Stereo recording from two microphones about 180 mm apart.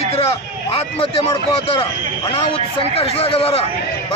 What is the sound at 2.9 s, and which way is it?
Speech, 35° left (ahead or behind).